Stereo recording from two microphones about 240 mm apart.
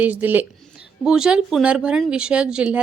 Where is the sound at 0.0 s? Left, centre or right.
Centre.